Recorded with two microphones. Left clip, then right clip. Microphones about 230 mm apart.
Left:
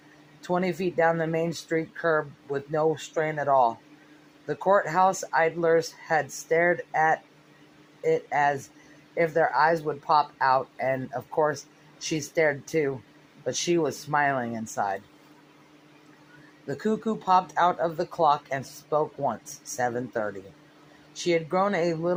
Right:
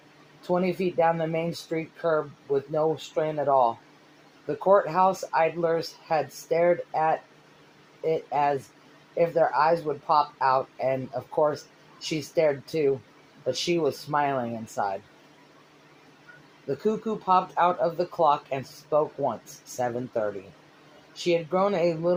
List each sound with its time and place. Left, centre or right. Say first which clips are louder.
0.4 s speech: right 1 dB; left
8.3 s speech: even; left
16.6 s speech: right 1 dB; left